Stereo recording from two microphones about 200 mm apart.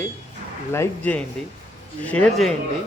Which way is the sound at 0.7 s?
10° left (ahead or behind).